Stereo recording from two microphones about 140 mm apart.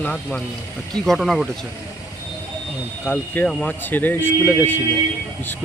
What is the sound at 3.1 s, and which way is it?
Speech, 10° left (ahead or behind).